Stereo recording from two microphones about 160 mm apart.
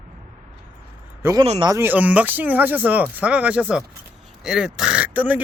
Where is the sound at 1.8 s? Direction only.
10° right (ahead or behind).